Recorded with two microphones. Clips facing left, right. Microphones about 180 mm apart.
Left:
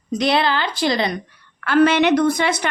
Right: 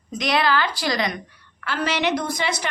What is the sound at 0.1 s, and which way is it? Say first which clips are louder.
A woman's voice: left 3 dB; 30° left (ahead or behind).